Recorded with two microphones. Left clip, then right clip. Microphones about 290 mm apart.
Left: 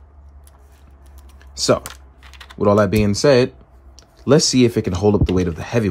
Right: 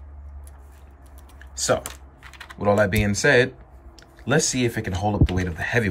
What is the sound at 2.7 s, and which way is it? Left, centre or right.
Speech, centre.